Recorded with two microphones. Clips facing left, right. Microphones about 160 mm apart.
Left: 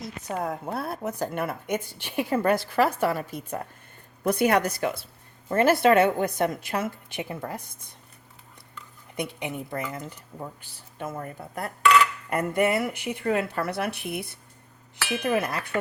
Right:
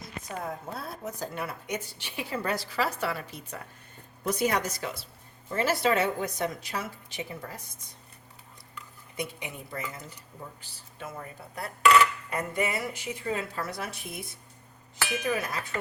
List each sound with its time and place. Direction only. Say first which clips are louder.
0.0 s a woman's voice: left 6 dB; 65° left (ahead or behind)
9.1 s a woman's voice: left 5 dB; 55° left (ahead or behind)